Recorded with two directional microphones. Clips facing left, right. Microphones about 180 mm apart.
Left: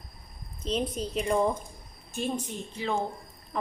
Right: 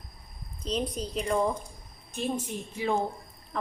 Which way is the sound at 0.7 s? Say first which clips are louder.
Left 1 dB; centre (ahead or behind).